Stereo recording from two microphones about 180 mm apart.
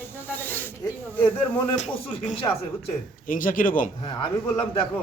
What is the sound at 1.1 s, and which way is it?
Speech, 10° left (ahead or behind).